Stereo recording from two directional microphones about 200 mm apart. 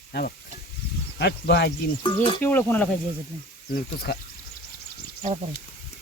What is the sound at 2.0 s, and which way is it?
Speech, 25° left (ahead or behind).